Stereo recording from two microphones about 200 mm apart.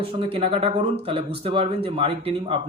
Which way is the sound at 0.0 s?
30° right (ahead or behind).